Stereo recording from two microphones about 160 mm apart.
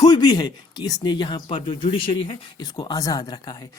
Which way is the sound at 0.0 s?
25° left (ahead or behind).